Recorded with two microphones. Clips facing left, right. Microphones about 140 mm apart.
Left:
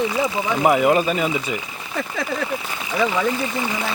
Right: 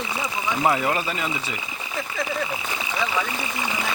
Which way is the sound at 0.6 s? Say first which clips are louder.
Left 6 dB; 15° left (ahead or behind).